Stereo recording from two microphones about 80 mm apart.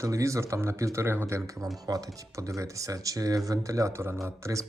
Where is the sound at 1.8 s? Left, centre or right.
Right.